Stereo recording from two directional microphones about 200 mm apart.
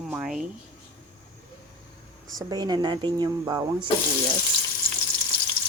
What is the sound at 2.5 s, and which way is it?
Speech, 20° right (ahead or behind).